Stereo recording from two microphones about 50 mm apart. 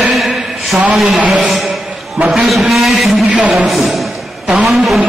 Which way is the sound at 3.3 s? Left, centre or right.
Right.